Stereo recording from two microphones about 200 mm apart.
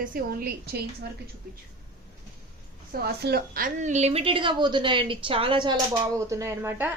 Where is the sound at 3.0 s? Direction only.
50° right (ahead or behind).